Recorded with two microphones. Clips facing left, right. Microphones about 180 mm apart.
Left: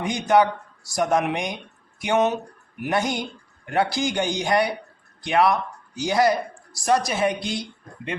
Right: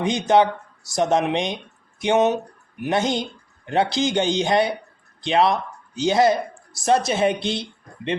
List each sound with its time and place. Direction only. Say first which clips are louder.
0.0 s speech: right 2 dB; 25° right (ahead or behind)